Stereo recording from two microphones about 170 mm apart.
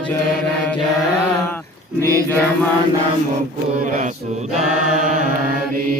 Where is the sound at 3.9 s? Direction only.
50° right (ahead or behind).